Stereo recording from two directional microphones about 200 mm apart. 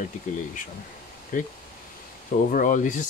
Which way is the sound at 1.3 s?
40° left (ahead or behind).